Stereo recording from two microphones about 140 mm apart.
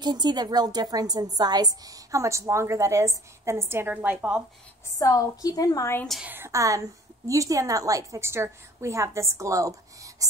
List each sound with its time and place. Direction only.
0.0 s a woman's voice: 30° right (ahead or behind); by 4.4 s 10° right (ahead or behind)
4.9 s a woman's voice: 25° left (ahead or behind)
6.2 s a woman's voice: 15° right (ahead or behind)